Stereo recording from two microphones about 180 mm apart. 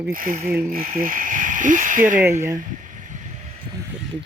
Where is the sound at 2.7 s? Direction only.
45° right (ahead or behind).